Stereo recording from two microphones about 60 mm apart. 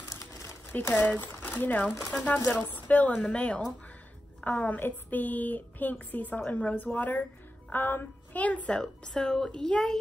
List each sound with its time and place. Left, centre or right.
0.7 s a woman's voice: left; by 9.9 s centre